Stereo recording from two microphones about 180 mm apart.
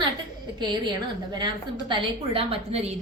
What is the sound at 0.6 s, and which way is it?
A woman's voice, 25° right (ahead or behind).